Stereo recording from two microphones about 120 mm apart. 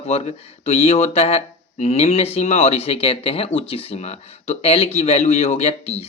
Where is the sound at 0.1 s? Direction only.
60° left (ahead or behind).